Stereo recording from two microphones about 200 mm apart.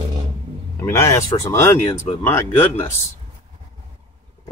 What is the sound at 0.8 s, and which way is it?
Speech, 15° left (ahead or behind).